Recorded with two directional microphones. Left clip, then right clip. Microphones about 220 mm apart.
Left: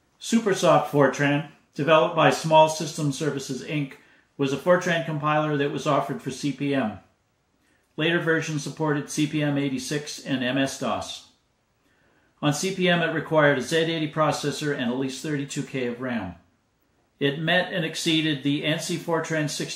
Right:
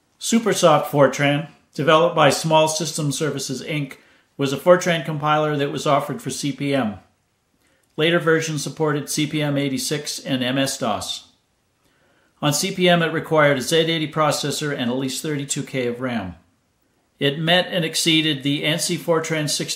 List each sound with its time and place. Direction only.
0.2 s speech: 50° right (ahead or behind)
7.9 s speech: 50° right (ahead or behind)
12.4 s speech: 50° right (ahead or behind)
17.2 s speech: 55° right (ahead or behind)